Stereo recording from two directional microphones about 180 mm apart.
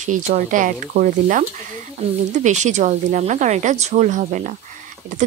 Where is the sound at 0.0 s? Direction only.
45° right (ahead or behind).